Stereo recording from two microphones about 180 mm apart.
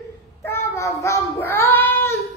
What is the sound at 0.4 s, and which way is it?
Child singing, 15° left (ahead or behind).